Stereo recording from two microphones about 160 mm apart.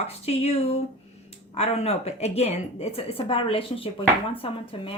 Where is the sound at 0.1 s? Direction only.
40° left (ahead or behind).